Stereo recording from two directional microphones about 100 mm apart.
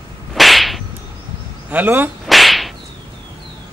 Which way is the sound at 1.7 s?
20° right (ahead or behind).